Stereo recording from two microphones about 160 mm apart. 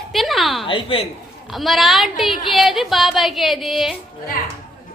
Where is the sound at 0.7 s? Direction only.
35° left (ahead or behind).